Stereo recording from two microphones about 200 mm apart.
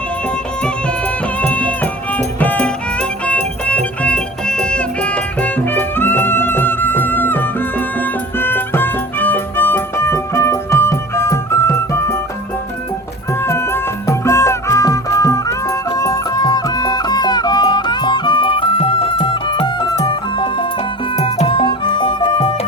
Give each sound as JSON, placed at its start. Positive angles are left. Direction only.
{"t": 1.4, "sound": "music", "side_deg": 5}
{"t": 13.4, "sound": "music", "side_deg": 15}